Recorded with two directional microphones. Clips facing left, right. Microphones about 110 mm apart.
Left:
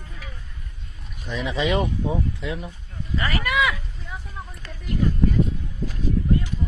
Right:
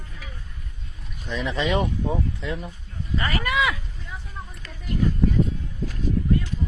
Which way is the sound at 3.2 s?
30° right (ahead or behind).